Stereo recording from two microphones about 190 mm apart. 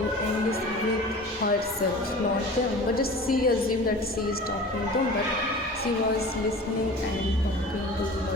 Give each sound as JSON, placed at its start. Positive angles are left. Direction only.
{"t": 2.9, "sound": "a woman's voice", "side_deg": 50}